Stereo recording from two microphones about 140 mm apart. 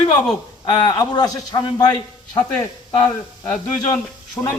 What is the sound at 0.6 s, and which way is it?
A man's voice, 30° left (ahead or behind).